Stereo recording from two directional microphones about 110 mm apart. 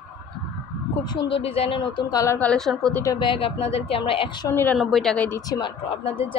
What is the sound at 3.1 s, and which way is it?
Speech, 50° left (ahead or behind).